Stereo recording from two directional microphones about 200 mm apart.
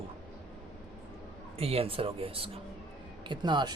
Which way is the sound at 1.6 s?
30° right (ahead or behind).